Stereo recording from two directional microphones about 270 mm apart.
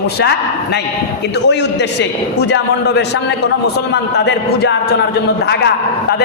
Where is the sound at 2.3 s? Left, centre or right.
Left.